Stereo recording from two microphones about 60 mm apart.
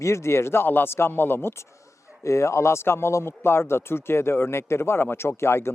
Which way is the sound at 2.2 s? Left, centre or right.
Left.